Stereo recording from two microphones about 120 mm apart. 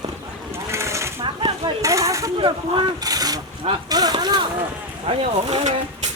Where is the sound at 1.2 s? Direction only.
40° right (ahead or behind).